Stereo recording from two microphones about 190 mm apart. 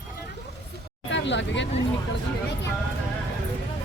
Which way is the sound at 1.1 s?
70° left (ahead or behind).